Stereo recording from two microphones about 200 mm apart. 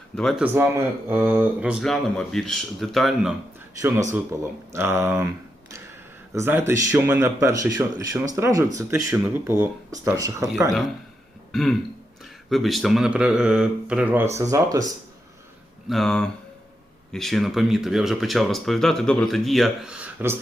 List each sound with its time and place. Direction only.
0.2 s speech: centre (ahead or behind)
3.8 s speech: 10° right (ahead or behind)
6.3 s speech: 10° right (ahead or behind)
11.5 s speech: centre (ahead or behind); by 14.9 s 20° right (ahead or behind)
15.9 s speech: centre (ahead or behind)